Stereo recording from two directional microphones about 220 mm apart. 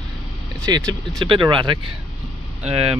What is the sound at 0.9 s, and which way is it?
Speech, 20° right (ahead or behind).